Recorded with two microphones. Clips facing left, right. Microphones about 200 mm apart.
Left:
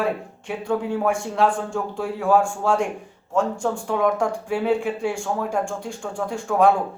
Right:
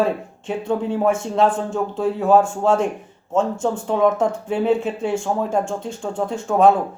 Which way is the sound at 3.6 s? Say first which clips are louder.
Right 4 dB; 20° right (ahead or behind).